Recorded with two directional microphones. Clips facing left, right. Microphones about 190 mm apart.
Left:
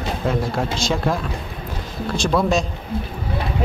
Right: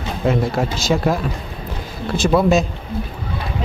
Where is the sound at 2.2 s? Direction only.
5° right (ahead or behind).